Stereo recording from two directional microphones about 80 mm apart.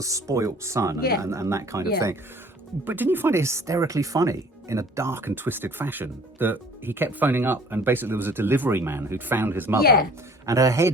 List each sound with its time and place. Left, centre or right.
0.0 s speech: right
2.8 s speech: right
10.4 s speech: right